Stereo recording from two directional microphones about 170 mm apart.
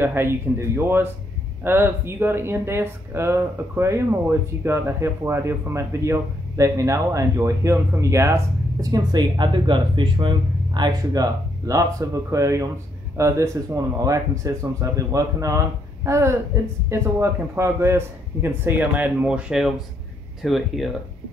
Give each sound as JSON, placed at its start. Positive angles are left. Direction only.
{"t": 0.0, "sound": "speech", "side_deg": -15}